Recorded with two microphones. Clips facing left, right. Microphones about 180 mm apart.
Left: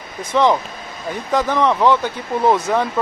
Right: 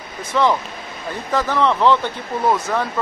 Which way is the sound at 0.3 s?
15° left (ahead or behind).